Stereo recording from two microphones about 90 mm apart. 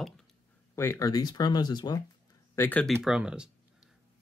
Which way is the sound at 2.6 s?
20° left (ahead or behind).